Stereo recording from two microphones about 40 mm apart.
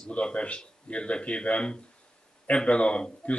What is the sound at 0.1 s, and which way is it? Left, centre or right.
A man's voice, left.